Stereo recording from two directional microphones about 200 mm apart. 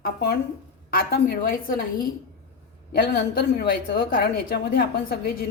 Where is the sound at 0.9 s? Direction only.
50° left (ahead or behind).